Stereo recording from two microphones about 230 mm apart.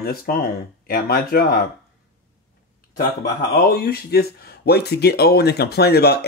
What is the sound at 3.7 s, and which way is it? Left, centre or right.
Speech, left.